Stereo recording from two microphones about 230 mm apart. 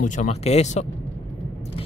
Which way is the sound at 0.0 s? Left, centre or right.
Left.